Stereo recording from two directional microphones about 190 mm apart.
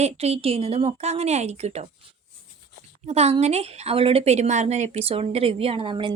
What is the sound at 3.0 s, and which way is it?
A woman's voice, 35° right (ahead or behind).